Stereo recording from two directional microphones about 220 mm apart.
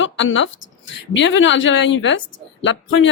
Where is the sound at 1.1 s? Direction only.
60° left (ahead or behind).